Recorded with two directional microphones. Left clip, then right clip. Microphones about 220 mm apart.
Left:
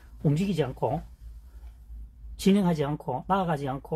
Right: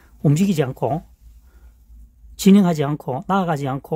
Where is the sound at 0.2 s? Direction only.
55° right (ahead or behind).